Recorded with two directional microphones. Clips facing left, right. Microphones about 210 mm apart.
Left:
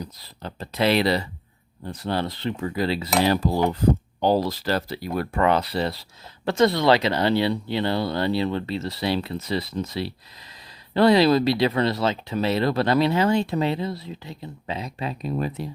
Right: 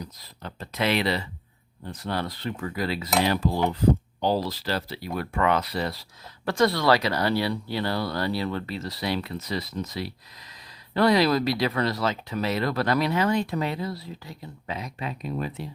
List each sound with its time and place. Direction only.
0.0 s speech: 30° left (ahead or behind)
4.2 s speech: 50° left (ahead or behind)